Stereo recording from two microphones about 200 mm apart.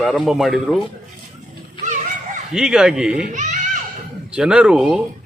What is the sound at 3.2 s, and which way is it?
Speech, 40° right (ahead or behind).